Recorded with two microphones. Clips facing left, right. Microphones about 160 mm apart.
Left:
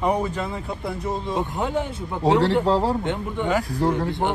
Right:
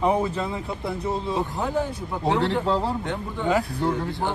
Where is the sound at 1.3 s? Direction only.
20° left (ahead or behind).